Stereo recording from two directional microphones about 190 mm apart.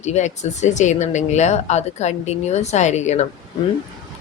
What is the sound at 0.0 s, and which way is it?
Speech, 35° left (ahead or behind).